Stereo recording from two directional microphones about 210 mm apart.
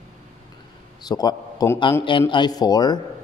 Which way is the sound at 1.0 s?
20° left (ahead or behind).